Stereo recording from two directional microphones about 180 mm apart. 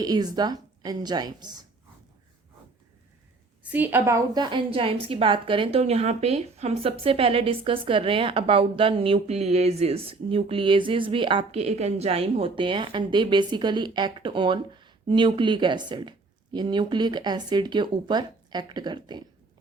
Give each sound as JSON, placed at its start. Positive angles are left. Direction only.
{"t": 0.0, "sound": "a woman's voice", "side_deg": -20}
{"t": 3.6, "sound": "a woman's voice", "side_deg": -10}